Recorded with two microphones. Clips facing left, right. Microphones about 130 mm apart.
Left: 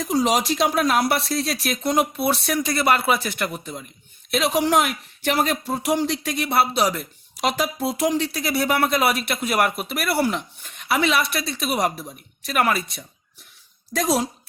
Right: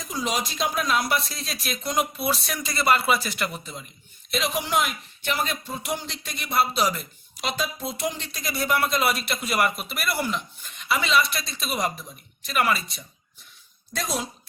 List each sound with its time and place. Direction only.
0.0 s a man's voice: 70° left (ahead or behind); by 3.8 s 50° left (ahead or behind)
4.3 s speech: 65° left (ahead or behind)
13.9 s speech: 75° left (ahead or behind)